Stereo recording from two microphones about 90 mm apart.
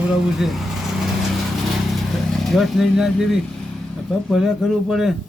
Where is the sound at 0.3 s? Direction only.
5° right (ahead or behind).